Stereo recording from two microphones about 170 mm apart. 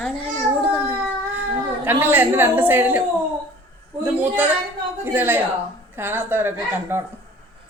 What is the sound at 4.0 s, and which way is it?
A woman's voice, 10° right (ahead or behind).